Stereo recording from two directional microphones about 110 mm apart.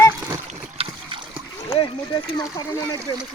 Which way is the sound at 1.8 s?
35° left (ahead or behind).